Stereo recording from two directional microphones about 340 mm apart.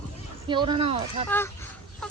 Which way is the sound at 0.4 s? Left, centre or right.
Centre.